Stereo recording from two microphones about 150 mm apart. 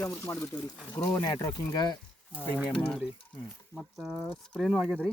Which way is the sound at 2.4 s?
10° right (ahead or behind).